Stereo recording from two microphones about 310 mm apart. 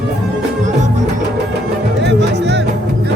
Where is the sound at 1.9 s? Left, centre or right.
Right.